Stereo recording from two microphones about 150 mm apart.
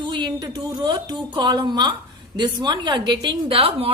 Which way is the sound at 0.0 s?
30° right (ahead or behind).